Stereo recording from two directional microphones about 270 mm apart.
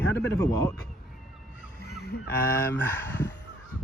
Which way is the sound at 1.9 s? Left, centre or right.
Left.